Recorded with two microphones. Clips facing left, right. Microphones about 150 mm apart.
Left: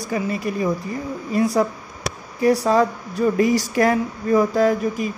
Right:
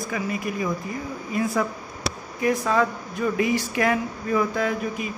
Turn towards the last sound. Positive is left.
turn(degrees=40)  # may be behind; listen again after turning